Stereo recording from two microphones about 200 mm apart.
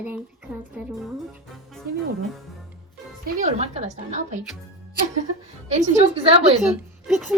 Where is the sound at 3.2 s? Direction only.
35° right (ahead or behind).